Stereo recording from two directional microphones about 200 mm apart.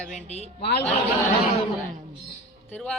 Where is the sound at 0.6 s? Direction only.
55° left (ahead or behind).